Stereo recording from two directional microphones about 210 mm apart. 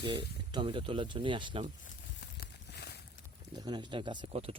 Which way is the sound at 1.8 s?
50° left (ahead or behind).